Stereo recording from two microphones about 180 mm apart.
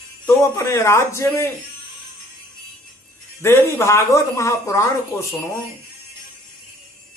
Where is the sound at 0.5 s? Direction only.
15° left (ahead or behind).